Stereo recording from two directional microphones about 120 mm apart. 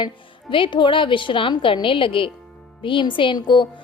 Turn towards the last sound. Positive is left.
turn(degrees=40)  # may be behind; listen again after turning